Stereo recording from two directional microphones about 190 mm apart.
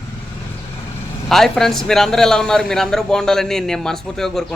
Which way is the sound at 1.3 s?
Centre (ahead or behind).